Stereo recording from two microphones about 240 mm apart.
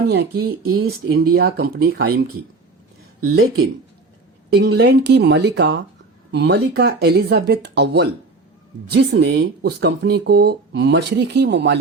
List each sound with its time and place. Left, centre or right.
0.1 s speech: right
3.2 s speech: right
4.5 s speech: right